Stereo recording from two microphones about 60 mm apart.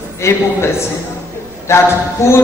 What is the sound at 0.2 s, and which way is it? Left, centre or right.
Speech, left.